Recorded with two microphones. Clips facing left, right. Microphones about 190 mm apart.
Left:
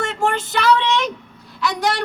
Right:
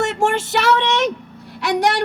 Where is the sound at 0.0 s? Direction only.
75° right (ahead or behind).